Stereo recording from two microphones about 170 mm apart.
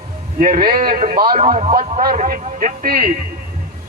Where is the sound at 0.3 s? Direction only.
55° right (ahead or behind); by 1.7 s 40° right (ahead or behind).